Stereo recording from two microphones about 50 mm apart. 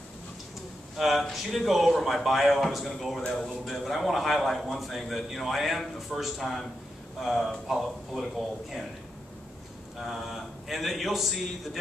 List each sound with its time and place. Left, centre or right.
0.9 s a man's voice: centre
9.9 s a man's voice: centre